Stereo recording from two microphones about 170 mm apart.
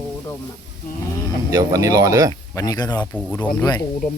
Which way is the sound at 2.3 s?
20° left (ahead or behind).